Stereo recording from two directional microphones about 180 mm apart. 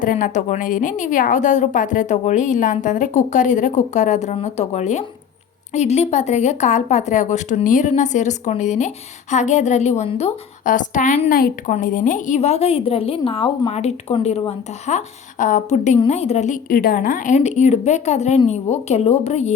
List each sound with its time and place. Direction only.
0.0 s a woman's voice: 45° left (ahead or behind)
10.7 s a woman's voice: 45° left (ahead or behind)
16.6 s a woman's voice: 55° left (ahead or behind); by 19.5 s 35° left (ahead or behind)